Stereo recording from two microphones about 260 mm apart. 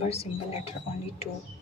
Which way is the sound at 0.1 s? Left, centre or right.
Left.